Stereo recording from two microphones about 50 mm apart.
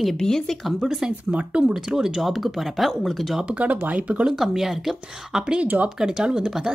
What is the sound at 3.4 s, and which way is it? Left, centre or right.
Speech, right.